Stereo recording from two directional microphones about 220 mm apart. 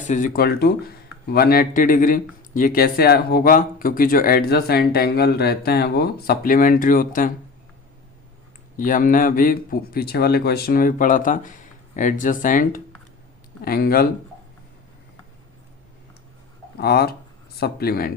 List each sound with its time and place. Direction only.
0.1 s speech: 35° left (ahead or behind)
8.7 s speech: 35° left (ahead or behind)
16.7 s speech: 45° left (ahead or behind)